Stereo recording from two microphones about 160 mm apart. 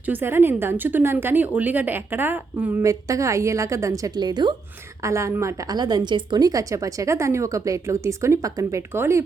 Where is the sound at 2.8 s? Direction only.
20° right (ahead or behind).